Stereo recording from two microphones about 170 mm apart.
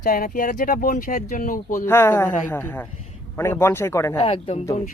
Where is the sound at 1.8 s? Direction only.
15° left (ahead or behind).